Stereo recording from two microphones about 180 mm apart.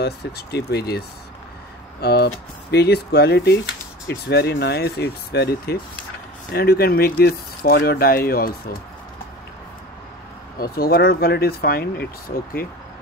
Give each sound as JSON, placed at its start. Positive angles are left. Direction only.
{"t": 0.0, "sound": "speech", "side_deg": 65}
{"t": 10.6, "sound": "speech", "side_deg": 60}